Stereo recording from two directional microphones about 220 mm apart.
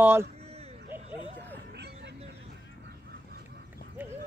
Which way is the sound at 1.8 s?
50° right (ahead or behind).